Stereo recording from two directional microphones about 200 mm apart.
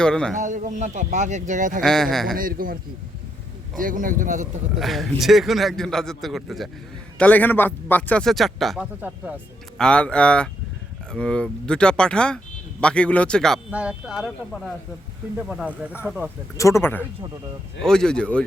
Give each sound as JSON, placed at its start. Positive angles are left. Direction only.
{"t": 0.0, "sound": "speech", "side_deg": 5}
{"t": 0.3, "sound": "speech", "side_deg": -40}
{"t": 1.8, "sound": "speech", "side_deg": 0}
{"t": 2.3, "sound": "a man's voice", "side_deg": -45}
{"t": 3.8, "sound": "speech", "side_deg": -40}
{"t": 4.8, "sound": "speech", "side_deg": 0}
{"t": 16.6, "sound": "speech", "side_deg": 15}